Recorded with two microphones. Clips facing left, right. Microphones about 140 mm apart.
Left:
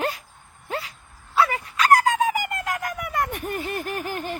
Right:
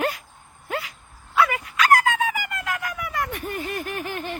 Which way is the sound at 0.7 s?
30° left (ahead or behind).